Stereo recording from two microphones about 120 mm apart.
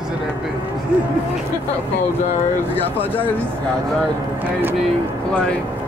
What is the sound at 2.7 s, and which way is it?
Speech, 15° left (ahead or behind).